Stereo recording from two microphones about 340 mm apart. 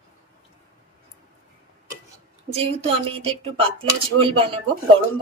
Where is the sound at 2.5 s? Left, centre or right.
Centre.